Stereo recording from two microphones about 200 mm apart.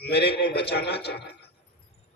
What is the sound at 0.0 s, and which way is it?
A man's voice, 55° left (ahead or behind).